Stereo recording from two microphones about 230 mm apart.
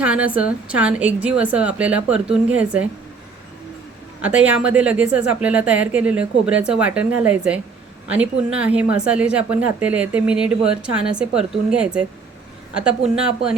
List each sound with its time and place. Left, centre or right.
0.0 s a woman's voice: centre
4.2 s a woman's voice: centre